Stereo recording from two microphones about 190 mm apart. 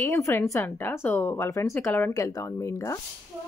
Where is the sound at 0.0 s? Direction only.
10° left (ahead or behind).